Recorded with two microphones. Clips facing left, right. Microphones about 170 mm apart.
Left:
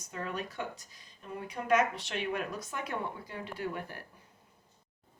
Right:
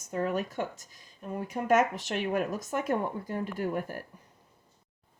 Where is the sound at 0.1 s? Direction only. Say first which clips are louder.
Right 8 dB; 40° right (ahead or behind).